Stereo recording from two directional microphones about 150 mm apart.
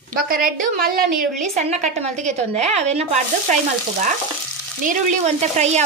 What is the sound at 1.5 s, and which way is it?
A woman's voice, 45° right (ahead or behind).